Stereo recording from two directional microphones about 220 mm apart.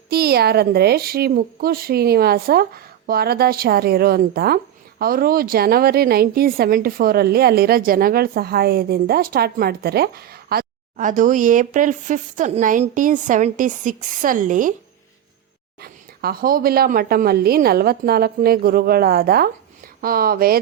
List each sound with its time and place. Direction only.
0.1 s a woman's voice: 45° right (ahead or behind)
15.8 s a woman's voice: 45° right (ahead or behind)